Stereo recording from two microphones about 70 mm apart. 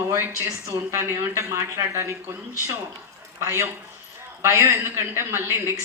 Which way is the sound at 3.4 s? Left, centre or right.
Right.